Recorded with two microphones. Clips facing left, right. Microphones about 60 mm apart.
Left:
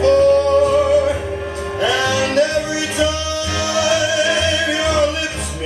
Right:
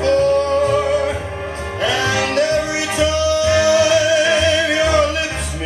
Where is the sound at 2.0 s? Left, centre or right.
Right.